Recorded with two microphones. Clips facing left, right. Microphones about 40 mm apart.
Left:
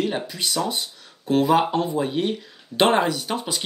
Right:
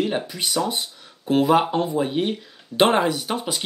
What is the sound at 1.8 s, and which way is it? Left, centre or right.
Speech, centre.